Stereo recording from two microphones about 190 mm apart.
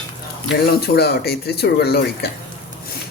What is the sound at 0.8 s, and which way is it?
Speech, 55° left (ahead or behind).